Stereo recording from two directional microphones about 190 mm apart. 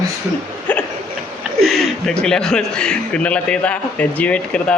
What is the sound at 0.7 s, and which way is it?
Hiccup, 10° left (ahead or behind).